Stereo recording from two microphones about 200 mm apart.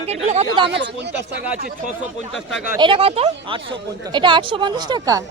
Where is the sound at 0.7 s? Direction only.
60° right (ahead or behind).